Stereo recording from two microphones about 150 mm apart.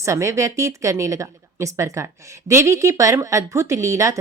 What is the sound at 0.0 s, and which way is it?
A woman's voice, 20° right (ahead or behind).